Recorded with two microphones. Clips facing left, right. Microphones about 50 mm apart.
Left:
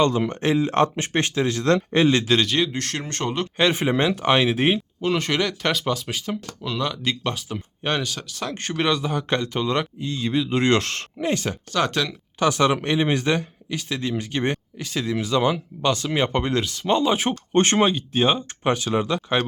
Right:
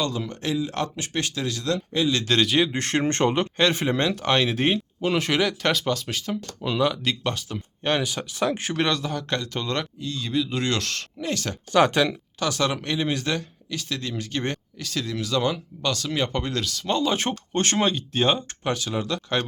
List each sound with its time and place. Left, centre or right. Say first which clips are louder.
0.0 s speech: left 7 dB; left
2.2 s speech: even; centre
2.7 s speech: right 5 dB; right
3.6 s speech: left 4 dB; centre
4.9 s speech: even; centre
6.6 s speech: right 5 dB; centre
8.0 s speech: right 4 dB; centre; by 11.5 s left
11.7 s speech: right 5 dB; centre
12.4 s speech: left 6 dB; left
17.7 s speech: left 3 dB; centre
18.6 s speech: left 5 dB; left